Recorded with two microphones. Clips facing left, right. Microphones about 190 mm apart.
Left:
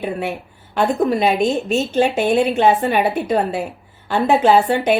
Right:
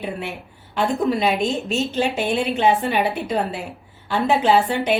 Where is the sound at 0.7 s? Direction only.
55° left (ahead or behind).